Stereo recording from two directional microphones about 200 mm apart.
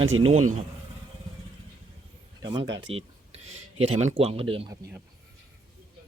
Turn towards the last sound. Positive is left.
turn(degrees=-25)  # may be behind; listen again after turning